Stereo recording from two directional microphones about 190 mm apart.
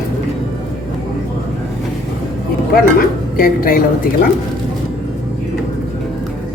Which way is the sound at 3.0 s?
50° left (ahead or behind).